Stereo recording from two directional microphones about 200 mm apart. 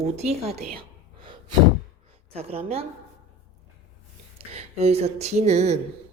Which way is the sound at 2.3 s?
30° right (ahead or behind).